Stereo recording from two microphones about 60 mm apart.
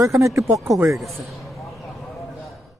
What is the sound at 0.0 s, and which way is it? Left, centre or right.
Speech, right.